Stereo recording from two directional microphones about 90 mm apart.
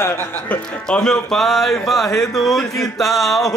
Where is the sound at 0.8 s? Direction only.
10° left (ahead or behind).